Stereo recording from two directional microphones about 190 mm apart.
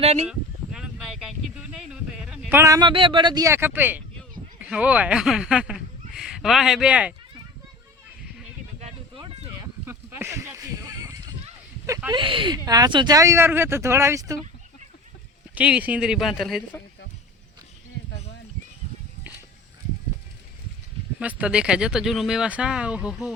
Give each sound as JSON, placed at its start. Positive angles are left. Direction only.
{"t": 0.0, "sound": "speech", "side_deg": -35}
{"t": 0.3, "sound": "a sound", "side_deg": -5}
{"t": 1.8, "sound": "speech", "side_deg": -5}
{"t": 9.8, "sound": "a sound", "side_deg": -10}
{"t": 12.1, "sound": "speech", "side_deg": -25}
{"t": 15.5, "sound": "speech", "side_deg": -5}
{"t": 21.2, "sound": "speech", "side_deg": -5}